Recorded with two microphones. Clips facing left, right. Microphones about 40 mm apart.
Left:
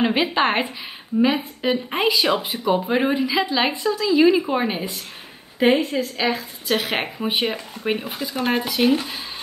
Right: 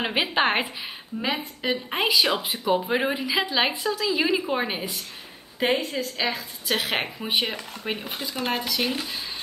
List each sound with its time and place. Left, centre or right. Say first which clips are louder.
0.0 s speech: left 4 dB; centre
4.4 s a woman's voice: left 4 dB; centre
4.6 s speech: left 5 dB; centre
5.6 s a woman's voice: left 6 dB; centre
8.0 s speech: left 4 dB; left
8.6 s a woman's voice: left 8 dB; centre